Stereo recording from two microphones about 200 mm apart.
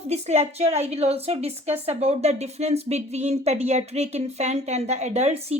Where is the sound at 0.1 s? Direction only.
35° right (ahead or behind).